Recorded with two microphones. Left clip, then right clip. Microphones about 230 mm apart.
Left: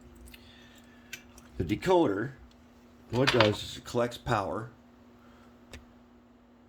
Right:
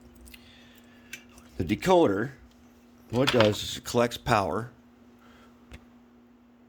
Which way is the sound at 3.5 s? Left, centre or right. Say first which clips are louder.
Right 5 dB; right.